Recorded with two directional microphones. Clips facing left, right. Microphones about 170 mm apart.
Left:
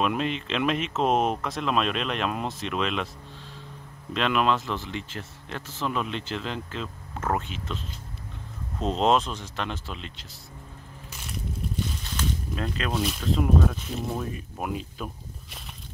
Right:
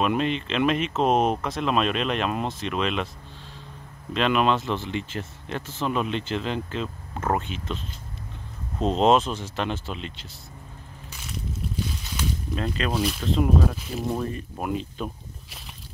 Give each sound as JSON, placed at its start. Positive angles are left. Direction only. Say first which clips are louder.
{"t": 0.0, "sound": "speech", "louder": "right 3 dB", "side_deg": 0}
{"t": 4.1, "sound": "speech", "louder": "right 2 dB", "side_deg": 0}
{"t": 4.6, "sound": "speech", "louder": "right 4 dB", "side_deg": -25}
{"t": 5.8, "sound": "speech", "louder": "right 3 dB", "side_deg": -5}
{"t": 8.8, "sound": "speech", "louder": "right 3 dB", "side_deg": 0}
{"t": 12.2, "sound": "speech", "louder": "right 2 dB", "side_deg": 0}